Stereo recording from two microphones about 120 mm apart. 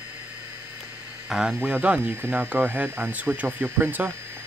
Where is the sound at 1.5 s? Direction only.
15° right (ahead or behind).